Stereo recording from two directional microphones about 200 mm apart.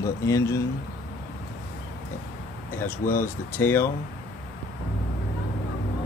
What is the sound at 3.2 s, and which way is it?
Speech, 10° left (ahead or behind).